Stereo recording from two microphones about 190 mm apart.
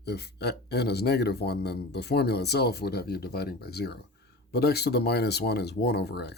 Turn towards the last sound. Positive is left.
turn(degrees=60)  # may be behind; listen again after turning